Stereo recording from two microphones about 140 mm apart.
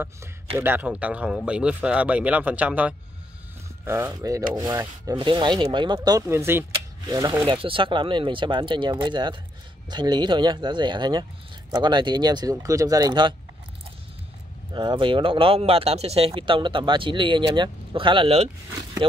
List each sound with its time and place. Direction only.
0.6 s speech: 15° right (ahead or behind)
5.1 s speech: 35° right (ahead or behind)
7.4 s speech: 40° right (ahead or behind)
14.7 s speech: 35° right (ahead or behind)
18.7 s speech: 30° right (ahead or behind)